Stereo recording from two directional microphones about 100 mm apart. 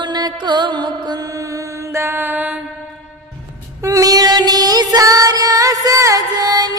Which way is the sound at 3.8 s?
35° right (ahead or behind).